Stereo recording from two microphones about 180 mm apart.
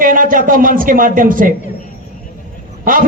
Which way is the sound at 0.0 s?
50° right (ahead or behind).